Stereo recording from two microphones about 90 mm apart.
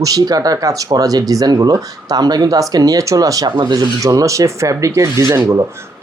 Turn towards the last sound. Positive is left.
turn(degrees=-35)  # may be behind; listen again after turning